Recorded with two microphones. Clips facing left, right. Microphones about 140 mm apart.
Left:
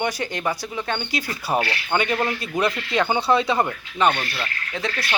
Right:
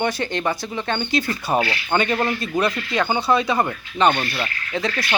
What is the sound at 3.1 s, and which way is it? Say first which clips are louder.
Speech: right 1 dB; 25° left (ahead or behind).